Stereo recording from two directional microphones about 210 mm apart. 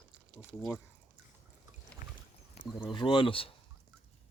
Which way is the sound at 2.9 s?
25° left (ahead or behind).